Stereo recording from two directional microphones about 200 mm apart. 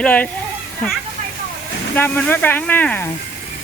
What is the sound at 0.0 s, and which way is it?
Speech, 5° left (ahead or behind).